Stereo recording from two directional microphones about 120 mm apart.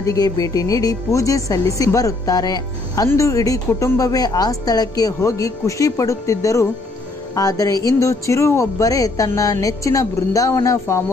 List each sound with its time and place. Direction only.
0.0 s speech: 30° left (ahead or behind)